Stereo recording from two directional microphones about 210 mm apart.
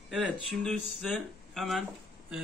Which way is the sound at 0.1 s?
Centre (ahead or behind).